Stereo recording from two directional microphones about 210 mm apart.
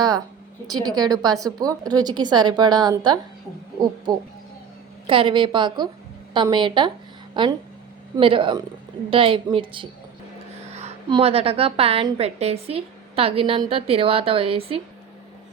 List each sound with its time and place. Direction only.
0.7 s a woman's voice: 20° right (ahead or behind)
5.0 s a woman's voice: 25° right (ahead or behind)